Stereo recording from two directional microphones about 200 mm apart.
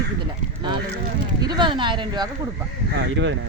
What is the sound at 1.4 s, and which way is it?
Speech, 20° right (ahead or behind).